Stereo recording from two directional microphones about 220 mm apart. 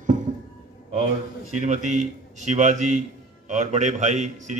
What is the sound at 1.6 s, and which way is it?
A man's voice, 30° right (ahead or behind).